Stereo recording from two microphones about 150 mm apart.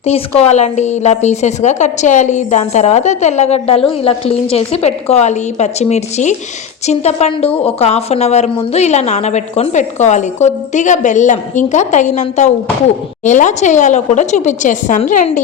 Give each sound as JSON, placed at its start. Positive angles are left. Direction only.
{"t": 0.0, "sound": "a woman's voice", "side_deg": 45}